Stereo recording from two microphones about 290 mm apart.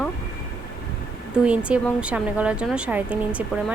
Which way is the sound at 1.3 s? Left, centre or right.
Centre.